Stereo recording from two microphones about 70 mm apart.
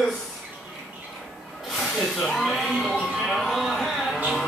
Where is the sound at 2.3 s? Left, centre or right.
Centre.